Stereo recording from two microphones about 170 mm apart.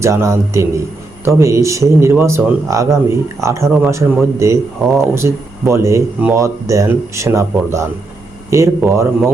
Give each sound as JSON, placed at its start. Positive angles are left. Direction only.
{"t": 0.0, "sound": "speech", "side_deg": -15}